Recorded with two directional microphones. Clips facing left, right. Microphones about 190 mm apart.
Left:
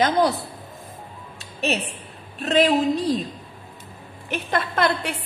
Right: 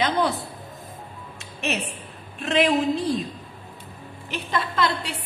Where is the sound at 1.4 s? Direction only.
35° left (ahead or behind).